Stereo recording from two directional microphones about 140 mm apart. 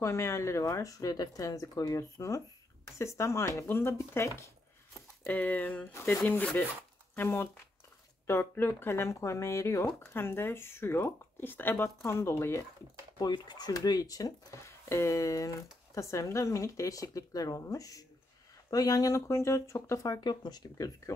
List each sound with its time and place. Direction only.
0.0 s speech: 20° left (ahead or behind)
13.2 s speech: 30° left (ahead or behind)